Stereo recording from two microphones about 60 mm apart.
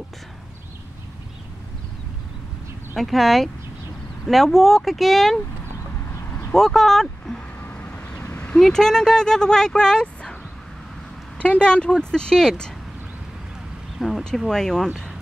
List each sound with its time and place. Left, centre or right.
3.0 s speech: centre
6.5 s speech: centre
7.7 s vehicle: left
8.5 s speech: centre
11.3 s speech: left
13.9 s a sound: centre
14.5 s speech: centre